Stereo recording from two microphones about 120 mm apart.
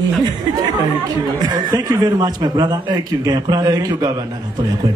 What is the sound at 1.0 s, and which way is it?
A man's voice, 35° right (ahead or behind).